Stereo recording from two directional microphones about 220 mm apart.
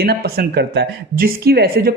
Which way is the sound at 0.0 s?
45° right (ahead or behind).